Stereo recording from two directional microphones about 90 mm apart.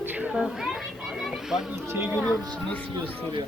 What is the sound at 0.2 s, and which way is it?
Speech, 10° right (ahead or behind).